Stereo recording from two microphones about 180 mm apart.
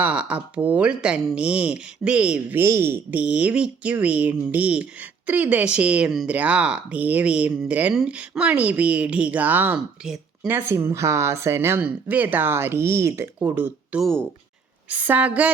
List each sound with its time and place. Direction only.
0.0 s speech: 5° right (ahead or behind)
14.0 s speech: 5° left (ahead or behind)
14.8 s speech: 10° right (ahead or behind)